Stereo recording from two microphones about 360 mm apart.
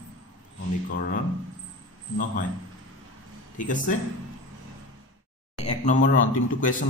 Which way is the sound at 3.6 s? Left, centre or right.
Left.